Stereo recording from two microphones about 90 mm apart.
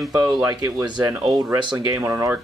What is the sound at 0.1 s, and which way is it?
Speech, 45° right (ahead or behind).